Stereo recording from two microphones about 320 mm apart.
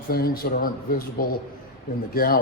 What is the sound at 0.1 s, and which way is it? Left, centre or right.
Speech, left.